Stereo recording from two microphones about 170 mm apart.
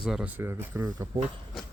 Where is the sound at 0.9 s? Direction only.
25° right (ahead or behind).